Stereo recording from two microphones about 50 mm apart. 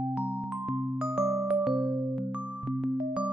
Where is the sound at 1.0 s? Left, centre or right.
Centre.